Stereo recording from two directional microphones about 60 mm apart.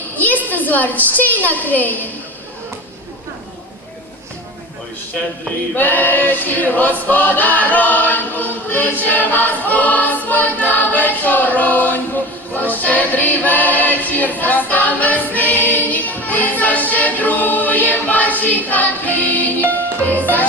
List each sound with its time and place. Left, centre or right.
0.2 s a woman's voice: left
5.7 s choir: left
12.5 s music: left